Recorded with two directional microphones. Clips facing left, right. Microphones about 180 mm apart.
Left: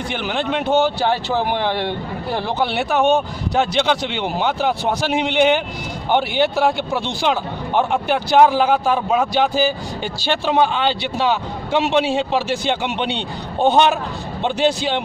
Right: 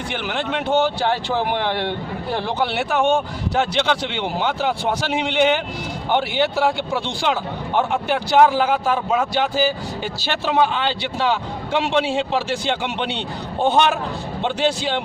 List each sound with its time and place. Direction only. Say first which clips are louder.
0.1 s a man's voice: left 2 dB; 20° left (ahead or behind)